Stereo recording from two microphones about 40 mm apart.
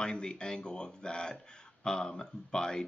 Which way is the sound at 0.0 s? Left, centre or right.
Centre.